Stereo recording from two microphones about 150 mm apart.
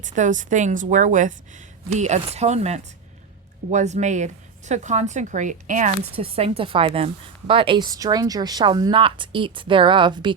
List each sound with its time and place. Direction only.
0.0 s a woman's voice: 55° right (ahead or behind)
6.1 s a woman's voice: 40° right (ahead or behind)